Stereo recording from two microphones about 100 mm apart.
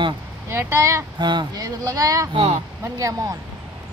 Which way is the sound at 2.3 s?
60° right (ahead or behind).